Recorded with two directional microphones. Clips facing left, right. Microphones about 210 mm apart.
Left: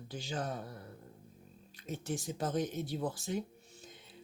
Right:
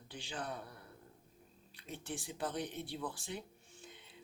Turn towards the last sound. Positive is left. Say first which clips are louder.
# left 2 dB
turn(degrees=40)  # may be behind; listen again after turning